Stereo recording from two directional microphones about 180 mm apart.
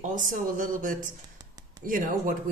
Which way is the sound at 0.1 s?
50° right (ahead or behind).